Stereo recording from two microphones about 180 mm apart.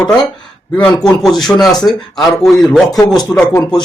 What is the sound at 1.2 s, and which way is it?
Speech, centre (ahead or behind).